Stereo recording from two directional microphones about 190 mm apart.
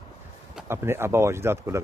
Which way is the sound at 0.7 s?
15° right (ahead or behind).